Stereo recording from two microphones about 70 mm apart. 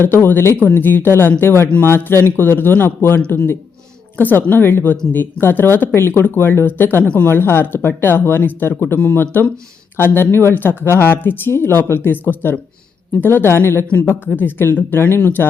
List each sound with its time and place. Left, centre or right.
0.0 s speech: left